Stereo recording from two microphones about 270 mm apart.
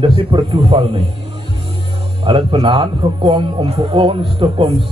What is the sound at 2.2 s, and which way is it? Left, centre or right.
Speech, centre.